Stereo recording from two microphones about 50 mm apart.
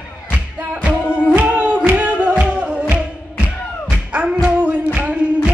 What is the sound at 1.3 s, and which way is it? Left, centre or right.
Music, right.